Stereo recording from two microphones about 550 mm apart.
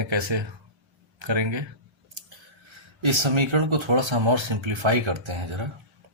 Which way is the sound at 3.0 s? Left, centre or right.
Right.